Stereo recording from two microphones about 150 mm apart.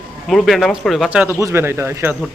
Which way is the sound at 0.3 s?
Centre (ahead or behind).